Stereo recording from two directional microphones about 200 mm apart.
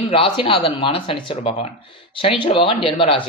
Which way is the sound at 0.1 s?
25° left (ahead or behind).